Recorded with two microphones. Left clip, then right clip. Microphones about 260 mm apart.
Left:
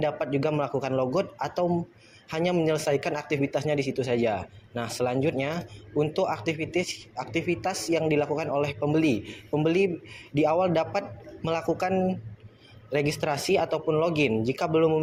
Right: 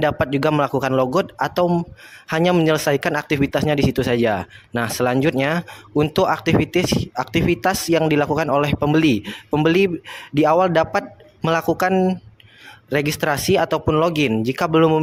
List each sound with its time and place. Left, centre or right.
0.0 s speech: right